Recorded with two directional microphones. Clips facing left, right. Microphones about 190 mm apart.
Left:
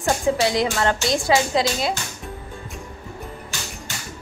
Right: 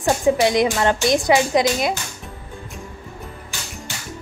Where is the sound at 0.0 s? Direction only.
20° right (ahead or behind).